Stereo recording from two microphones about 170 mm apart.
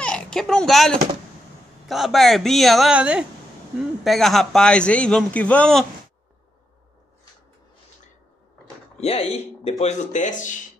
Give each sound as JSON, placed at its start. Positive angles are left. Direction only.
{"t": 0.0, "sound": "a man's voice", "side_deg": 5}
{"t": 8.9, "sound": "speech", "side_deg": 35}